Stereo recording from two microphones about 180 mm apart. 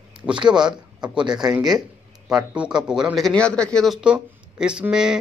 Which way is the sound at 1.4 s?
5° right (ahead or behind).